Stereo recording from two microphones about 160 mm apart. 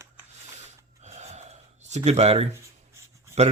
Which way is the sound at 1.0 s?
45° right (ahead or behind).